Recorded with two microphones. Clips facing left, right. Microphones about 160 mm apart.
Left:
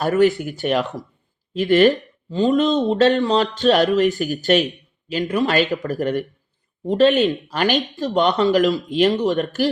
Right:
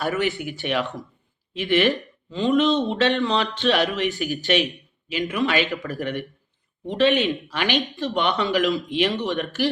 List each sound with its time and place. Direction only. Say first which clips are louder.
0.0 s speech: left 8 dB; 40° left (ahead or behind)